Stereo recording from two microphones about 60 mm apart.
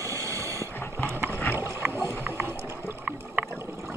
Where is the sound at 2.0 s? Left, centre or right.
Right.